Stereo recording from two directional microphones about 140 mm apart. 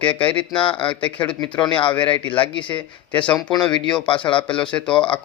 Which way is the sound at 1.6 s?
35° left (ahead or behind).